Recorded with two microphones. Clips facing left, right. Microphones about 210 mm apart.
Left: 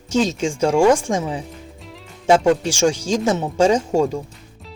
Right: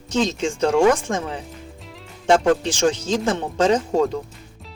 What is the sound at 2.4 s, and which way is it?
Speech, 10° left (ahead or behind).